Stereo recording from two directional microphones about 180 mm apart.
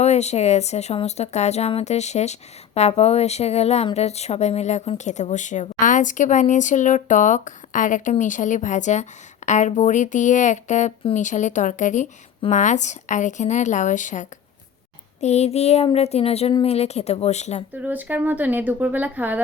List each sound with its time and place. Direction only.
0.0 s speech: 40° left (ahead or behind)
17.7 s speech: 10° right (ahead or behind)